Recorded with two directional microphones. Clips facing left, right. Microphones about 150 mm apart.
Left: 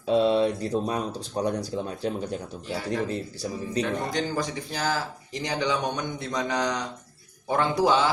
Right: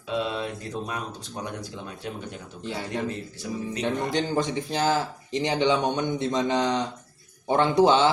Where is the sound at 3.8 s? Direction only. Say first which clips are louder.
Even; 25° right (ahead or behind).